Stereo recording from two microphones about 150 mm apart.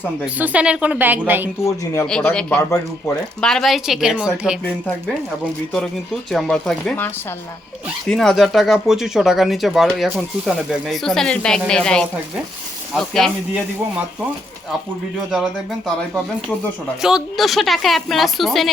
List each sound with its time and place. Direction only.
0.3 s a woman's voice: 10° right (ahead or behind)
1.6 s speech: 20° left (ahead or behind)
2.0 s speech: 5° left (ahead or behind)
6.3 s speech: 5° left (ahead or behind)
17.0 s speech: 5° right (ahead or behind)